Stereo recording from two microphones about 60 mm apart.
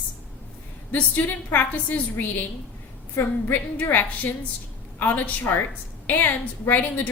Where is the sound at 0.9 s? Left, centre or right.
Left.